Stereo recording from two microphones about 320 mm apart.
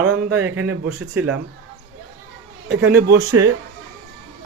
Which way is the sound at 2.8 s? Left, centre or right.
Right.